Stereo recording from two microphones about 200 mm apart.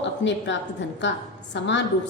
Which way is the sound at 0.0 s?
65° left (ahead or behind).